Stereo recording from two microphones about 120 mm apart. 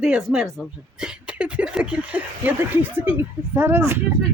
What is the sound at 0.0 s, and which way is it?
Speech, 5° right (ahead or behind).